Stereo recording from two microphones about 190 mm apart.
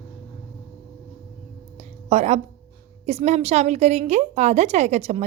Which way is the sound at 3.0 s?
35° right (ahead or behind).